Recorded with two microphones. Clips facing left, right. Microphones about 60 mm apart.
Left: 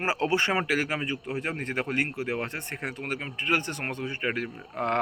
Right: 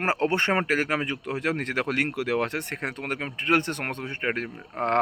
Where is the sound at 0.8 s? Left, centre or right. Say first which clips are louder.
Right 3 dB; right.